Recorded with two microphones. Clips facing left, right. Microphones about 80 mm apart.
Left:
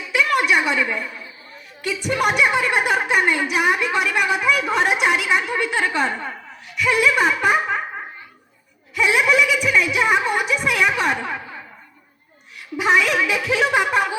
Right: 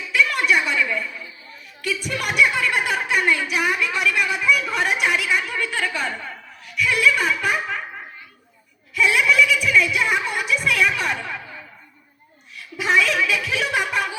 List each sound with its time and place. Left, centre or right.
0.1 s a sound: left
1.8 s a woman's voice: left
9.0 s a woman's voice: left
12.7 s a woman's voice: left